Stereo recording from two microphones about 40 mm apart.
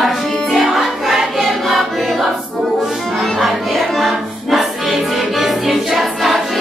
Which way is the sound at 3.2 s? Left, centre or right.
Centre.